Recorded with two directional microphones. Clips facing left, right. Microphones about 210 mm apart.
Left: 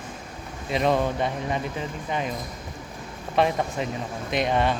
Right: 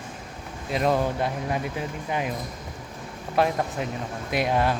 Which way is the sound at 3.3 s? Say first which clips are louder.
Left 1 dB; centre (ahead or behind).